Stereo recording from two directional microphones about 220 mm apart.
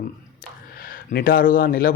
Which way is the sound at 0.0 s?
40° left (ahead or behind).